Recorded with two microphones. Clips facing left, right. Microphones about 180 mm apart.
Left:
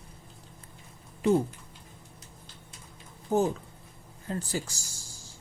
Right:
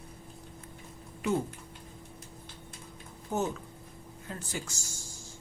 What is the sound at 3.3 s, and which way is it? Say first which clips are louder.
Speech: left 6 dB; 35° left (ahead or behind).